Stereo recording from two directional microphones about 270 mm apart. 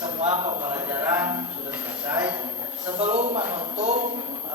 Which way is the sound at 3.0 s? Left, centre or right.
Right.